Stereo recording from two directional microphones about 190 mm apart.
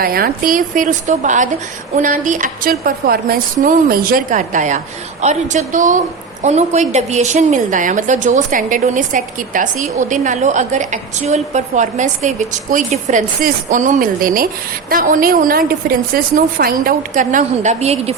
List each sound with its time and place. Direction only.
0.0 s a woman's voice: 50° right (ahead or behind); by 18.1 s 35° right (ahead or behind)